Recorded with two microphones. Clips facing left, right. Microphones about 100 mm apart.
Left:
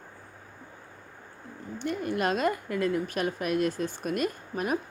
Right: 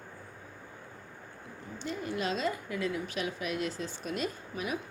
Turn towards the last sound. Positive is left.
turn(degrees=50)  # may be behind; listen again after turning